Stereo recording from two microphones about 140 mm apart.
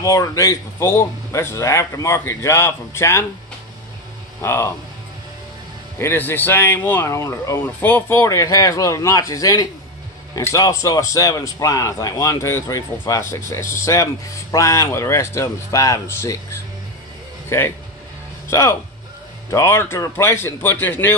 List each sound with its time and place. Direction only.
0.0 s a man's voice: 25° left (ahead or behind)
4.4 s a man's voice: 20° left (ahead or behind)
5.9 s speech: 15° left (ahead or behind)
7.6 s a man's voice: 10° left (ahead or behind)
17.5 s a man's voice: 20° left (ahead or behind)